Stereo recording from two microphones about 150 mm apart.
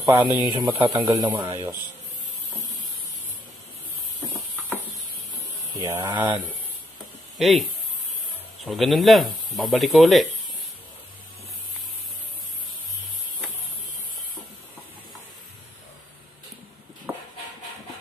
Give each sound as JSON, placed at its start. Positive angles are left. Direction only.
{"t": 0.0, "sound": "speech", "side_deg": -15}
{"t": 0.7, "sound": "speech", "side_deg": -35}
{"t": 1.5, "sound": "speech", "side_deg": -20}
{"t": 5.8, "sound": "speech", "side_deg": -20}
{"t": 7.3, "sound": "speech", "side_deg": 0}
{"t": 8.6, "sound": "speech", "side_deg": 0}